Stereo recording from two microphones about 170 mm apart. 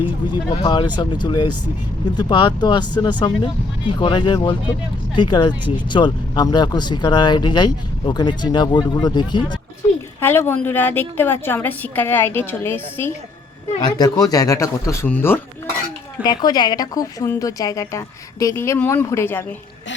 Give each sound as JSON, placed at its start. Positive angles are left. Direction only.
{"t": 0.3, "sound": "speech", "side_deg": 25}
{"t": 10.2, "sound": "a woman's voice", "side_deg": 15}
{"t": 16.2, "sound": "speech", "side_deg": 25}